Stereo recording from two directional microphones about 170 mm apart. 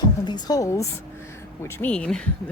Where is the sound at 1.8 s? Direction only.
5° left (ahead or behind).